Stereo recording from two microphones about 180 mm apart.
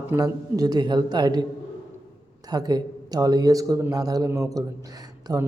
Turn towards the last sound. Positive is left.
turn(degrees=-20)  # may be behind; listen again after turning